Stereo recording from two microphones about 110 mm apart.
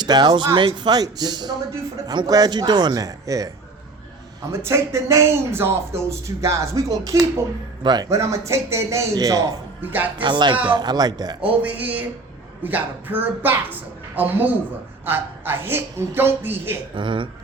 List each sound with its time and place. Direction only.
0.0 s speech: 40° right (ahead or behind)
4.6 s speech: 25° right (ahead or behind)
9.8 s a woman's voice: 15° right (ahead or behind)
10.2 s speech: 45° right (ahead or behind)
11.4 s a woman's voice: 15° right (ahead or behind)
16.9 s speech: 50° right (ahead or behind)